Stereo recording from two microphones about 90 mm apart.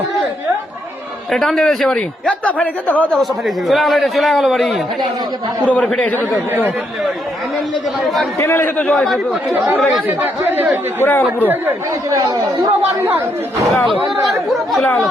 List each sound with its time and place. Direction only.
1.3 s a man's voice: 5° left (ahead or behind)
3.2 s a man's voice: centre (ahead or behind)
5.6 s a man's voice: 15° left (ahead or behind)
8.0 s a man's voice: centre (ahead or behind)
8.4 s speech: 25° left (ahead or behind)
8.9 s a man's voice: centre (ahead or behind)
11.0 s speech: 25° left (ahead or behind)
12.1 s speech: 40° right (ahead or behind)
13.0 s speech: 20° right (ahead or behind)
13.9 s a man's voice: centre (ahead or behind)